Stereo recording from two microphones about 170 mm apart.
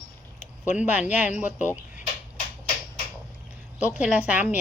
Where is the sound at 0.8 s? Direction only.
10° right (ahead or behind).